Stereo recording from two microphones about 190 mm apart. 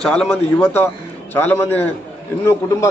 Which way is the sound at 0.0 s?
5° left (ahead or behind).